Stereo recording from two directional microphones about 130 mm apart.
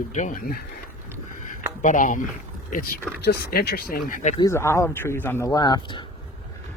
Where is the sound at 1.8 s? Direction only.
90° left.